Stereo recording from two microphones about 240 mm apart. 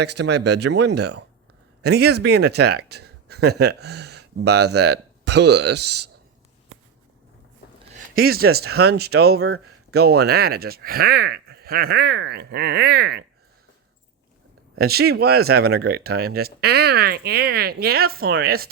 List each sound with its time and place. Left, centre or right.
0.0 s speech: right
7.9 s speech: right
14.8 s speech: right